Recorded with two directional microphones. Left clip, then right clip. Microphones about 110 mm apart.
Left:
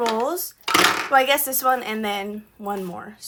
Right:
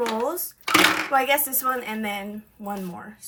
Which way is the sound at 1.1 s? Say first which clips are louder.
Left 3 dB; 40° left (ahead or behind).